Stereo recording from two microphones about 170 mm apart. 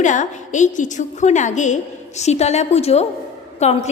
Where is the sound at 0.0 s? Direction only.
45° left (ahead or behind).